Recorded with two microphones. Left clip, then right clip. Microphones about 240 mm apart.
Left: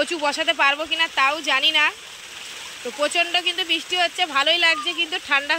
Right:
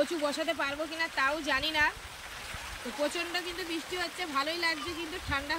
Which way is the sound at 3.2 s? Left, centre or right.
Left.